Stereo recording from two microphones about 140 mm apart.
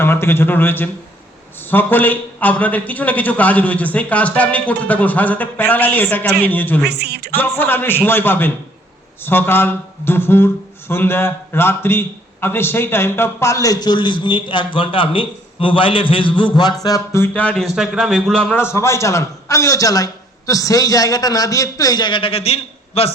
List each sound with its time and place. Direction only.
0.0 s speech: 15° left (ahead or behind); by 16.3 s 40° left (ahead or behind)
16.4 s a sound: 30° left (ahead or behind)
16.8 s speech: 20° left (ahead or behind); by 18.3 s 5° right (ahead or behind)
18.3 s speech: 5° left (ahead or behind)
18.6 s a man's voice: 20° left (ahead or behind); by 23.1 s 45° left (ahead or behind)